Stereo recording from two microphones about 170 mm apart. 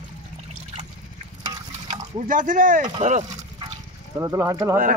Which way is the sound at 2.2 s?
50° right (ahead or behind).